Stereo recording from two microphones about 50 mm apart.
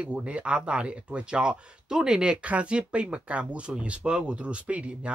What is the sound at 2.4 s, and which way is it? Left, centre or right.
Speech, right.